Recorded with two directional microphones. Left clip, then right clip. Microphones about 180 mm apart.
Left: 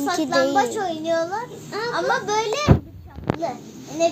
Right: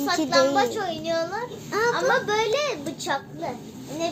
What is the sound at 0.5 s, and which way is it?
A child's voice, 60° left (ahead or behind).